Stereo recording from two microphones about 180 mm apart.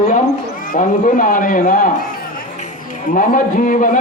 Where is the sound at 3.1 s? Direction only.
50° left (ahead or behind).